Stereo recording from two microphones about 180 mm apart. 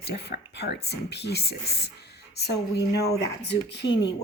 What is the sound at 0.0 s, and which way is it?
Speech, 65° left (ahead or behind).